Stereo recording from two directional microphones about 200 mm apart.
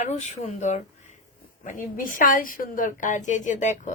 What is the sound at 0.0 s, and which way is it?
A woman's voice, 35° left (ahead or behind).